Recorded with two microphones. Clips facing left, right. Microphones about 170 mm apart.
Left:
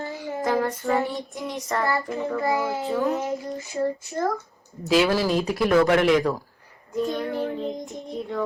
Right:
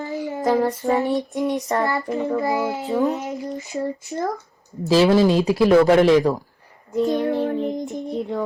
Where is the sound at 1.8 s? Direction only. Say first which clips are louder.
Right 3 dB; 20° right (ahead or behind).